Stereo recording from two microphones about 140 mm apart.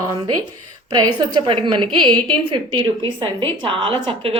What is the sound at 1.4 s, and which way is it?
A woman's voice, 35° right (ahead or behind).